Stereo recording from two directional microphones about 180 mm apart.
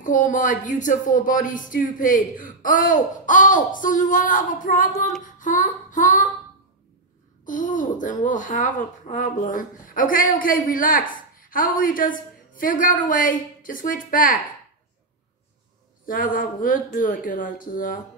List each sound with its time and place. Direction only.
0.0 s speech: 45° left (ahead or behind)
5.2 s female singing: 45° left (ahead or behind)
7.4 s speech: 45° left (ahead or behind)
16.1 s speech: 50° left (ahead or behind)